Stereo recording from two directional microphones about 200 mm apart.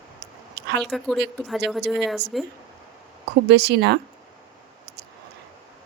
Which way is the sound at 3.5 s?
60° right (ahead or behind).